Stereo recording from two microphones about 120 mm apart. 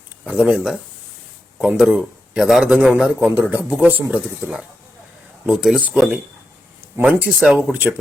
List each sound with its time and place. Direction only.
0.3 s a man's voice: 10° right (ahead or behind)
6.8 s a sound: 20° right (ahead or behind)
7.3 s speech: centre (ahead or behind)
7.5 s a man's voice: 15° right (ahead or behind)